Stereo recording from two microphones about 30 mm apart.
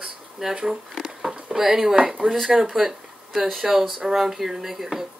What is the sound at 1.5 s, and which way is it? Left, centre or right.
Speech, centre.